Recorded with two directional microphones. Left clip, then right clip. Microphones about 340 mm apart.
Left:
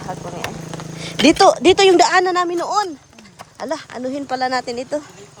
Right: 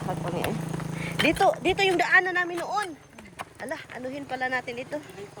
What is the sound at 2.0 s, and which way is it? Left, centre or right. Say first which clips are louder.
Speech: left 8 dB; centre.